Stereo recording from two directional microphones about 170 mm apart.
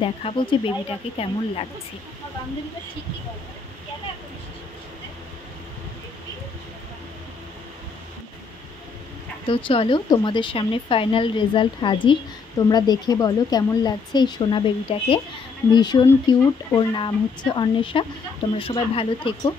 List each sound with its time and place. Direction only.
0.0 s speech: 30° left (ahead or behind)
9.5 s speech: 30° left (ahead or behind)